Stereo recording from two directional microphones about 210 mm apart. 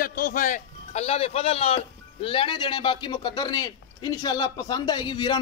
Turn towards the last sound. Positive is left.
turn(degrees=20)  # may be behind; listen again after turning